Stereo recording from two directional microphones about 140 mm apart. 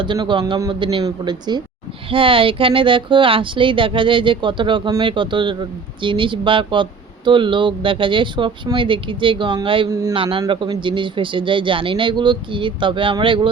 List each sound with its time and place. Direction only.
0.0 s speech: 35° right (ahead or behind)
9.9 s a man's voice: 25° right (ahead or behind)
10.2 s speech: 40° right (ahead or behind)